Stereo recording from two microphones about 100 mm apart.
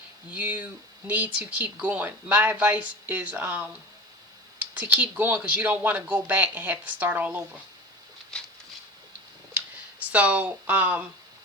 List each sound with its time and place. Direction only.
0.3 s speech: 15° right (ahead or behind)
4.8 s speech: 15° right (ahead or behind)
8.3 s a sound: 5° left (ahead or behind)
10.0 s speech: 15° right (ahead or behind)